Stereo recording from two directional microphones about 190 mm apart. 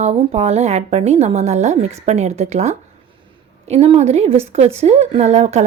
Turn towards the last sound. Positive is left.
turn(degrees=-35)  # may be behind; listen again after turning